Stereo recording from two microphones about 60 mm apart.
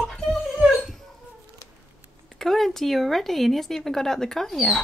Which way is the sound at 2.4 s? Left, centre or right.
Centre.